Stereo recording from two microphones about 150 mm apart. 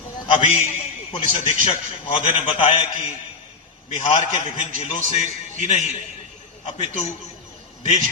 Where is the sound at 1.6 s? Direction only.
40° left (ahead or behind).